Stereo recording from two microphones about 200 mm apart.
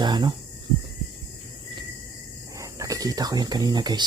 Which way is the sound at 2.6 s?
15° right (ahead or behind).